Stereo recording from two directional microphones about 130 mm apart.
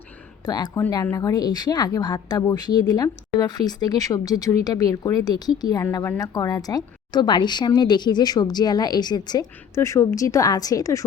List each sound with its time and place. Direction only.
0.4 s a woman's voice: 30° left (ahead or behind)